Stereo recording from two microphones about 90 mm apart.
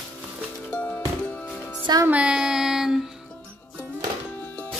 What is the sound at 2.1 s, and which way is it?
Music, 10° right (ahead or behind).